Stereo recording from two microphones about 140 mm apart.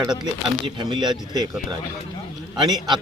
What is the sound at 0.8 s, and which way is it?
Speech, 30° right (ahead or behind).